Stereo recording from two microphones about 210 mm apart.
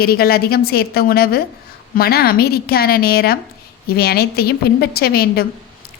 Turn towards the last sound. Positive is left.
turn(degrees=45)  # may be behind; listen again after turning